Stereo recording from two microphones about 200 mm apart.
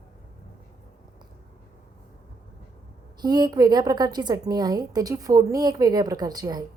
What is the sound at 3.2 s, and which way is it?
A woman's voice, 20° right (ahead or behind).